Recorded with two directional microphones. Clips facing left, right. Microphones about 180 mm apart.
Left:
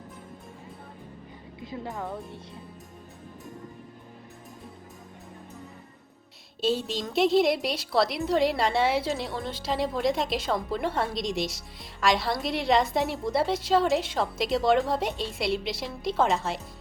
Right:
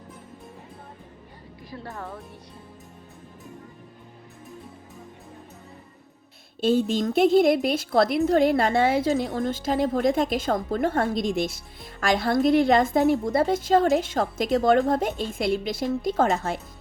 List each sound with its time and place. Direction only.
1.6 s speech: 20° left (ahead or behind)
6.6 s a woman's voice: 50° right (ahead or behind)